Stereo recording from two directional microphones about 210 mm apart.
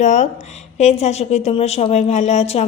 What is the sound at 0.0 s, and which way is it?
A woman's voice, 35° left (ahead or behind).